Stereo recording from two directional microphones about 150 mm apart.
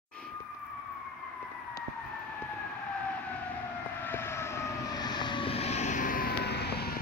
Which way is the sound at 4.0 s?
15° left (ahead or behind).